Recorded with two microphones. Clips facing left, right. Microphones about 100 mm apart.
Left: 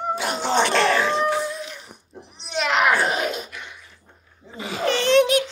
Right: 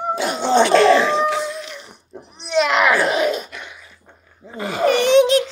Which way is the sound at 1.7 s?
75° right (ahead or behind).